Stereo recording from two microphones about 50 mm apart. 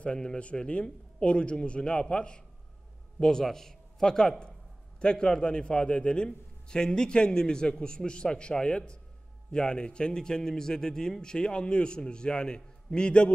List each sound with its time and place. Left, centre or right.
0.0 s a man's voice: centre